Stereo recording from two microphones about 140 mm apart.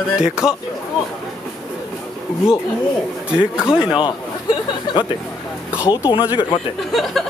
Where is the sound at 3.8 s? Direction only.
35° left (ahead or behind).